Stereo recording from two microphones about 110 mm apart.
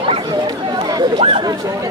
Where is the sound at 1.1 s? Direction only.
55° right (ahead or behind).